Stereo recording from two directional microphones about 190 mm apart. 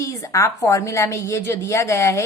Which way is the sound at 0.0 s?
15° left (ahead or behind).